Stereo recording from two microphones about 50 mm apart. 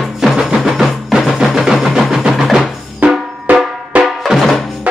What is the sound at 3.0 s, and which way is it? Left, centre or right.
Drum, right.